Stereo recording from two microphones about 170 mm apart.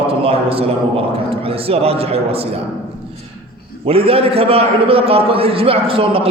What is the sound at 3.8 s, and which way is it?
A man's voice, 35° right (ahead or behind).